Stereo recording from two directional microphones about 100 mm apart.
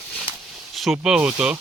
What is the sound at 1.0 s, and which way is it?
Speech, 10° right (ahead or behind).